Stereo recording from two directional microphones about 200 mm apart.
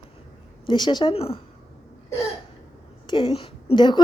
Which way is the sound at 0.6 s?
20° left (ahead or behind).